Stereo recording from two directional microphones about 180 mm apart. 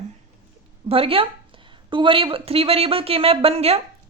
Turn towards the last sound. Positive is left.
turn(degrees=-35)  # may be behind; listen again after turning